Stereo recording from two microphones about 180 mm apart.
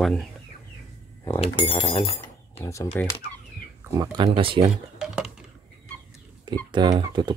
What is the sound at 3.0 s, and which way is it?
Fowl, 10° left (ahead or behind).